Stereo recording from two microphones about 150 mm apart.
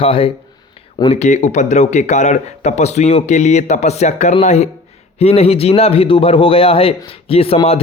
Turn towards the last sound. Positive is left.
turn(degrees=40)  # may be behind; listen again after turning